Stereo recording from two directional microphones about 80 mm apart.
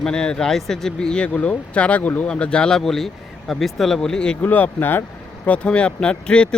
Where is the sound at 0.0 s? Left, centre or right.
Centre.